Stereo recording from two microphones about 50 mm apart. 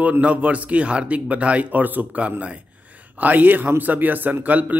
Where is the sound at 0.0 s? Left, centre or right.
Right.